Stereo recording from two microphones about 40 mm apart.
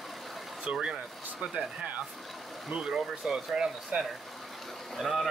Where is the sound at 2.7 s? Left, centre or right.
Centre.